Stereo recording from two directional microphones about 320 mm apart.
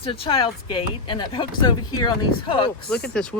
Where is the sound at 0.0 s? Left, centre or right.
Centre.